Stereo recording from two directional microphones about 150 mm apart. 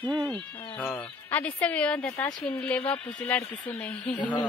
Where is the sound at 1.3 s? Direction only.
10° left (ahead or behind).